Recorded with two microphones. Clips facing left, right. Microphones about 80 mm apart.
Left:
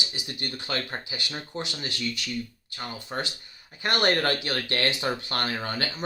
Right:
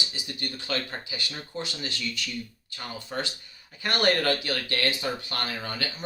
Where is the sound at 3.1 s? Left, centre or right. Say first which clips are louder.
Right 1 dB; left.